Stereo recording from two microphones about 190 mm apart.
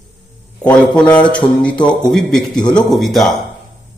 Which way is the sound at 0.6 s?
5° left (ahead or behind).